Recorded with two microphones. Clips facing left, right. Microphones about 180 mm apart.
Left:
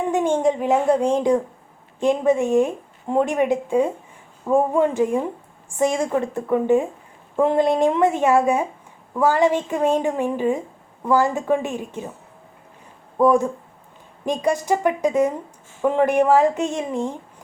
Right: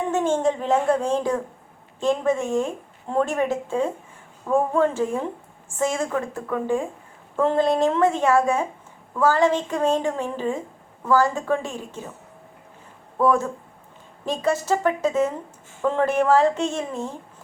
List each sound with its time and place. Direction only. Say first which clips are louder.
0.1 s a woman's voice: left 2 dB; 15° left (ahead or behind)
13.1 s a woman's voice: left 4 dB; 15° left (ahead or behind)